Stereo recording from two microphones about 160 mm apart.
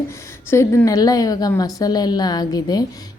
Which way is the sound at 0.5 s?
15° left (ahead or behind).